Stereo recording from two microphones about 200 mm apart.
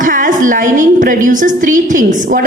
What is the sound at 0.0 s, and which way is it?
A woman's voice, 40° right (ahead or behind).